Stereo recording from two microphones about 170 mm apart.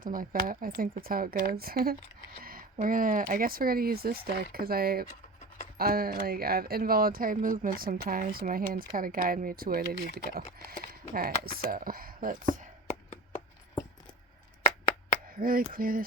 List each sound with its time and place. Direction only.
0.0 s speech: 55° right (ahead or behind)
15.4 s speech: 60° right (ahead or behind)